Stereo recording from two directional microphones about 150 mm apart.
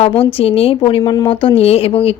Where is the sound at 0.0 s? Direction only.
40° left (ahead or behind).